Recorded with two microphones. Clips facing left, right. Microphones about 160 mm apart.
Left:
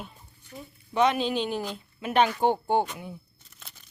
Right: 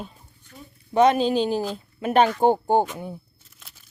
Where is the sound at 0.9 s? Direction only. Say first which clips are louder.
Right 6 dB; 40° right (ahead or behind).